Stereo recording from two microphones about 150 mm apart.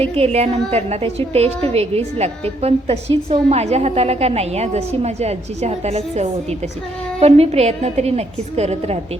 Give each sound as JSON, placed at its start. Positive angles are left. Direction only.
{"t": 0.2, "sound": "a woman's voice", "side_deg": -40}